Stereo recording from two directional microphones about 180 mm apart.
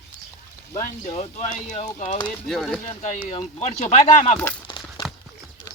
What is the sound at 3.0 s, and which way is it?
Speech, 45° left (ahead or behind).